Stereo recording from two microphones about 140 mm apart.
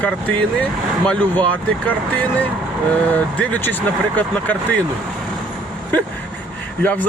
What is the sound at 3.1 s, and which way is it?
Speech, 15° left (ahead or behind).